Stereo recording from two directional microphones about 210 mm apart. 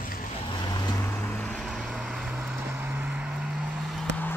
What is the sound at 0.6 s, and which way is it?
Vehicle, 20° left (ahead or behind).